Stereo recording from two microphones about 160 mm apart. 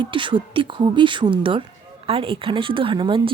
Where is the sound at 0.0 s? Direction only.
30° right (ahead or behind).